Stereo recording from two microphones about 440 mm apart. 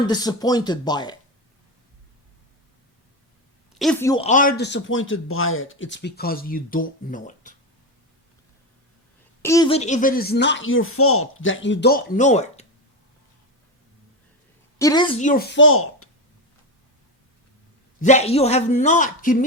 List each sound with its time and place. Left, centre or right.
0.1 s a man's voice: centre
3.8 s speech: centre
9.4 s speech: centre
14.8 s speech: centre; by 16.0 s left
18.0 s a man's voice: centre